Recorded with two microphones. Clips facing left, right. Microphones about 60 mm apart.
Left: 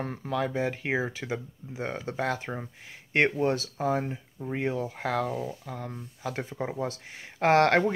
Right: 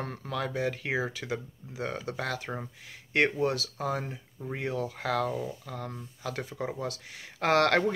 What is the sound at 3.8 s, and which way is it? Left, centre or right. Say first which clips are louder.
Speech: left 4 dB; centre.